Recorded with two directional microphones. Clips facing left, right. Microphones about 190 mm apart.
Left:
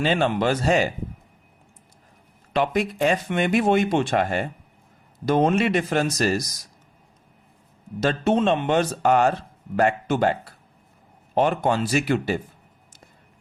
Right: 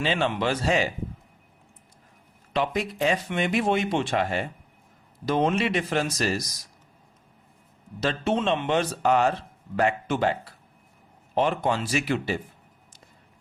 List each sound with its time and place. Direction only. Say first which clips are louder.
0.0 s speech: left 4 dB; 45° left (ahead or behind)
2.5 s speech: left 4 dB; 55° left (ahead or behind)
8.0 s speech: left 4 dB; 40° left (ahead or behind)